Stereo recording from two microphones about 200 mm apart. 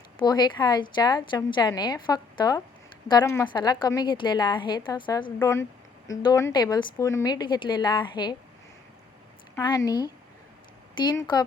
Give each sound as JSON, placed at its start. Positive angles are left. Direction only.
{"t": 0.2, "sound": "a woman's voice", "side_deg": 20}
{"t": 5.4, "sound": "a woman's voice", "side_deg": 15}
{"t": 9.6, "sound": "a woman's voice", "side_deg": 15}